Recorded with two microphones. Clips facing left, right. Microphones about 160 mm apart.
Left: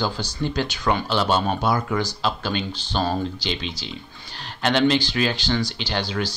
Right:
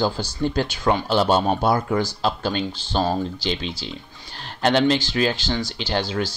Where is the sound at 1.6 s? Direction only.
30° right (ahead or behind).